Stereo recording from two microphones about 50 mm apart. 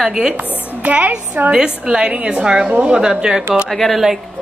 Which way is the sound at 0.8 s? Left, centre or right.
Right.